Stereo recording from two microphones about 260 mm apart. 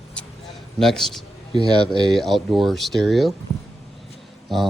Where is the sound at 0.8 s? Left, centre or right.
Centre.